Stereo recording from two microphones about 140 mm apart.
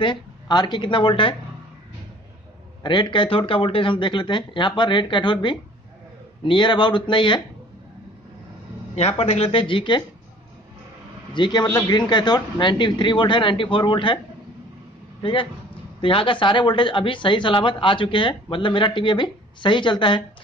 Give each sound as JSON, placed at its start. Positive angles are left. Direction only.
{"t": 0.0, "sound": "speech", "side_deg": 35}
{"t": 2.8, "sound": "speech", "side_deg": 35}
{"t": 9.2, "sound": "speech", "side_deg": 45}
{"t": 11.3, "sound": "speech", "side_deg": 35}
{"t": 16.0, "sound": "speech", "side_deg": 40}